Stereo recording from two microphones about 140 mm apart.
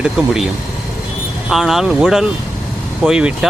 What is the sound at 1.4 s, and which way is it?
Speech, centre (ahead or behind).